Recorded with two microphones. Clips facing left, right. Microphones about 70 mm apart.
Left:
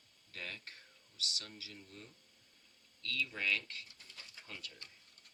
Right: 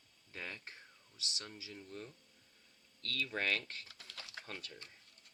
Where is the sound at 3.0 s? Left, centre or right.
Right.